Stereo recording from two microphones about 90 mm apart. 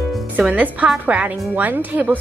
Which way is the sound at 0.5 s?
20° right (ahead or behind).